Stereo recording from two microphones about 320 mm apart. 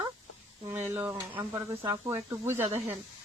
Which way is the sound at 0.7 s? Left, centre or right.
Centre.